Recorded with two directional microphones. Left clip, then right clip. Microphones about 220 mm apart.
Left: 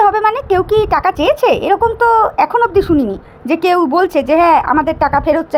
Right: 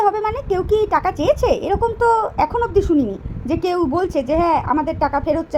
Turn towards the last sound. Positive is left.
turn(degrees=20)  # may be behind; listen again after turning